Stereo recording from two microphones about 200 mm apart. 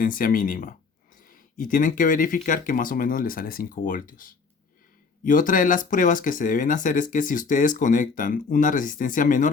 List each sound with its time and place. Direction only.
0.0 s speech: 45° left (ahead or behind)